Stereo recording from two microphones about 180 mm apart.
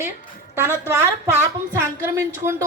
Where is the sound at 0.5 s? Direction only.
15° right (ahead or behind).